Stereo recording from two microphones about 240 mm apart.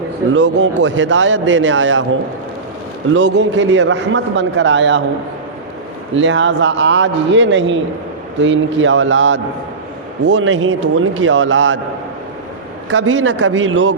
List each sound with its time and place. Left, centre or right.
0.3 s a man's voice: right
3.1 s a man's voice: right
6.1 s a man's voice: right
12.9 s a man's voice: right